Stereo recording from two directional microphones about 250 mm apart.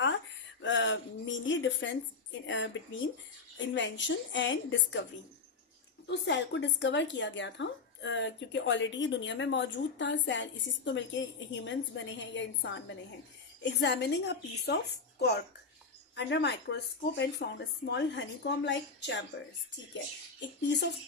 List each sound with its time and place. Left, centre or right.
0.6 s a sound: left
2.5 s speech: left
6.1 s speech: left
16.1 s speech: left
20.7 s speech: left